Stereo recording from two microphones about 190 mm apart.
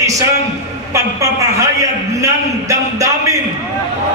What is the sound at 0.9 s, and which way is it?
A man's voice, 15° right (ahead or behind).